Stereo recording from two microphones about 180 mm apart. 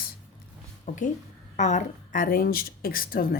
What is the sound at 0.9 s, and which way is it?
A woman's voice, 45° left (ahead or behind).